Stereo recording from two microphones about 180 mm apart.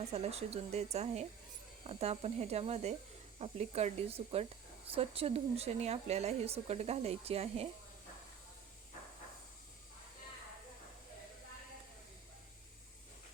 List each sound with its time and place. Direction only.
0.0 s a woman's voice: 35° right (ahead or behind)